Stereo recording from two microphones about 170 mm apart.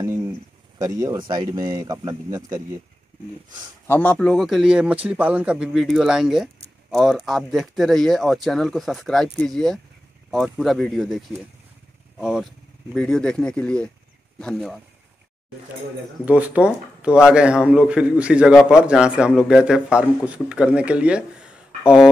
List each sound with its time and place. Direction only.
0.0 s a sound: 15° right (ahead or behind)
0.7 s speech: 20° right (ahead or behind)
3.8 s speech: 10° left (ahead or behind)
16.3 s speech: 10° right (ahead or behind)